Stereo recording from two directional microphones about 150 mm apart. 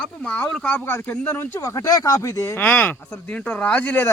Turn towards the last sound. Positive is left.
turn(degrees=10)  # may be behind; listen again after turning